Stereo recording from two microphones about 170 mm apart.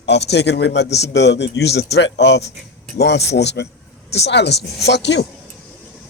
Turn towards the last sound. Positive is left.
turn(degrees=85)